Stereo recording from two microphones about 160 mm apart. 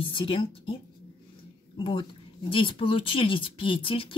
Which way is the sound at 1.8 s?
30° left (ahead or behind).